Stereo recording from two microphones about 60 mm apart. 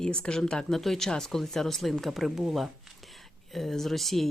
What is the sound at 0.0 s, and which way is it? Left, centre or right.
Speech, centre.